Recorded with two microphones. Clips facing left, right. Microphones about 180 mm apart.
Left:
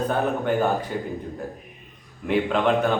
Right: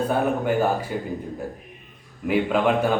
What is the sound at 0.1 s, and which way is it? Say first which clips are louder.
Speech: right 1 dB; 5° right (ahead or behind).